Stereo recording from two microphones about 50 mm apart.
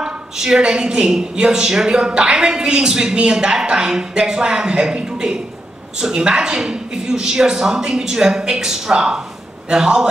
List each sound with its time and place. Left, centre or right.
0.0 s a woman's voice: centre